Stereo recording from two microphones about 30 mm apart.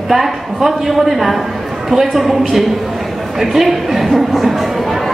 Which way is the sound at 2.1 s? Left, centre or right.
Centre.